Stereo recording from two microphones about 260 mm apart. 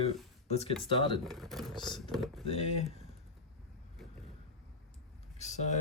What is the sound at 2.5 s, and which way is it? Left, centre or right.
Speech, left.